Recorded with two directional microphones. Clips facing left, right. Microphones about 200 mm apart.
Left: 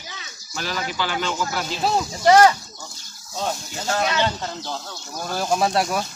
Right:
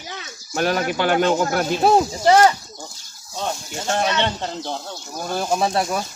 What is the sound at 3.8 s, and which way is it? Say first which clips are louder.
Speech: right 1 dB; 25° right (ahead or behind).